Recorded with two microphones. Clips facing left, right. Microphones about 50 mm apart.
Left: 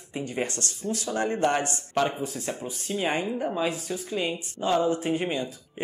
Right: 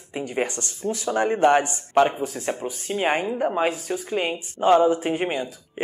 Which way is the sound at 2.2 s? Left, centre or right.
Right.